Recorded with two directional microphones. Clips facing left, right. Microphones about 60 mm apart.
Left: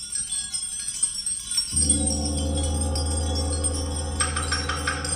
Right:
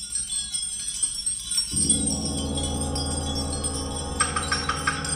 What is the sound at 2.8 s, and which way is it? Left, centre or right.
Chime, centre.